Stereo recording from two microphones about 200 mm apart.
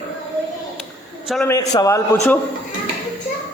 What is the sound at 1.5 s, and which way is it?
Speech, 15° left (ahead or behind).